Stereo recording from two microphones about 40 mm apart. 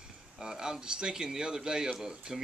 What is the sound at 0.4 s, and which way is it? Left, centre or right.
Speech, centre.